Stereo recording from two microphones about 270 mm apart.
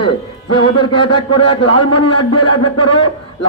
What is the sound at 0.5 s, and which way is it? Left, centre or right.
A man's voice, centre.